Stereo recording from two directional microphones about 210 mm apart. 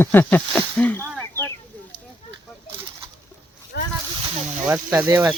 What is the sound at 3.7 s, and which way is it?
Snake, 50° left (ahead or behind).